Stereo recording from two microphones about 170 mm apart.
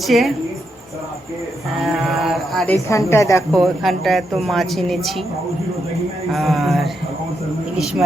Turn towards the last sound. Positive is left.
turn(degrees=-5)  # may be behind; listen again after turning